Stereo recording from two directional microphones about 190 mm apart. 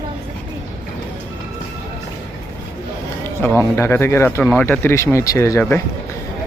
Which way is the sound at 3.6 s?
15° left (ahead or behind).